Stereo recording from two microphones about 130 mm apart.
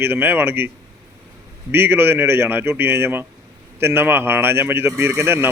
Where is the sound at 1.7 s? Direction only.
15° right (ahead or behind).